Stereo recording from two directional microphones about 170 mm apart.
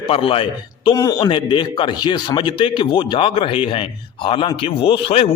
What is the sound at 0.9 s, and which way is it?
A man's voice, 20° left (ahead or behind).